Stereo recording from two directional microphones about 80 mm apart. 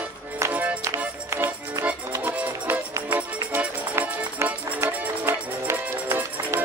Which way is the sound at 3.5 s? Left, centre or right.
Right.